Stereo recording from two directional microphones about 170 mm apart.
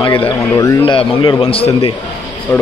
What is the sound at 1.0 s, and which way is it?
Speech, 30° left (ahead or behind).